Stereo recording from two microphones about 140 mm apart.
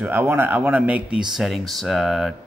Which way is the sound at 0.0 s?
15° right (ahead or behind).